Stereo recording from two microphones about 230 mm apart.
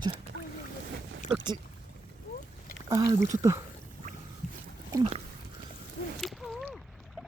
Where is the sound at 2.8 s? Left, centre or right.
Centre.